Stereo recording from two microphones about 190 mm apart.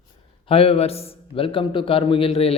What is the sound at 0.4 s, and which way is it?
A man's voice, 30° left (ahead or behind).